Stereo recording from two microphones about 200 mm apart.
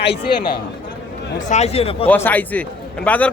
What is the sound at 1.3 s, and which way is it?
Speech, 35° left (ahead or behind).